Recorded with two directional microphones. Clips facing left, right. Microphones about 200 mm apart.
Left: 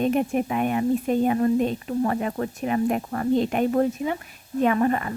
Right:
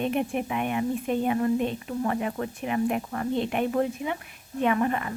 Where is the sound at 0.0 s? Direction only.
40° left (ahead or behind).